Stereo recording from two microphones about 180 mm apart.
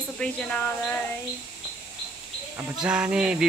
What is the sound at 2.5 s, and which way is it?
Speech, 5° right (ahead or behind).